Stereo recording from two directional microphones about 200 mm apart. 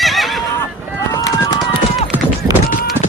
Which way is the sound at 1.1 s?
20° left (ahead or behind).